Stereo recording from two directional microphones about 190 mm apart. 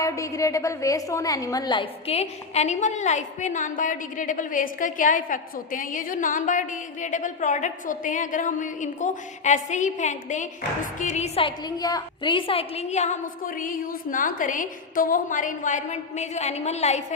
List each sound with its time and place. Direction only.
0.0 s a woman's voice: 15° left (ahead or behind); by 17.0 s 35° left (ahead or behind)